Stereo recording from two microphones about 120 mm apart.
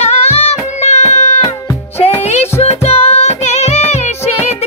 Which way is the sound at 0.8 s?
65° left (ahead or behind).